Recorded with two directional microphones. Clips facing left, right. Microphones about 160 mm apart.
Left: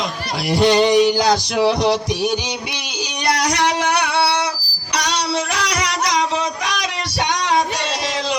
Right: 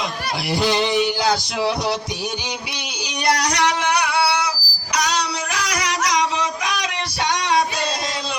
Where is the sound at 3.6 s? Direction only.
25° left (ahead or behind).